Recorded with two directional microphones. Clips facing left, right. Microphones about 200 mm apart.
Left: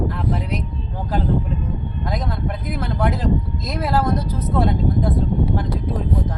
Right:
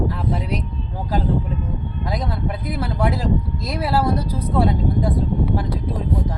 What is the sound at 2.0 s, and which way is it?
Speech, 10° right (ahead or behind).